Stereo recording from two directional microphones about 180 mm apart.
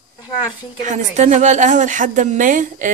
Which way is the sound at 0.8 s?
40° right (ahead or behind).